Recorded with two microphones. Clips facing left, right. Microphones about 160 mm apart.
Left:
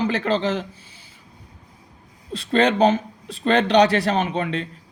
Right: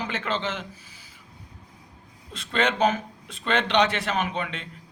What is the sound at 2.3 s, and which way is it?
Speech, 35° left (ahead or behind).